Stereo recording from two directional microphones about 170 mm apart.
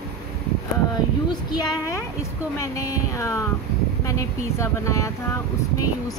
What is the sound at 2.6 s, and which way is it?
Speech, 20° left (ahead or behind).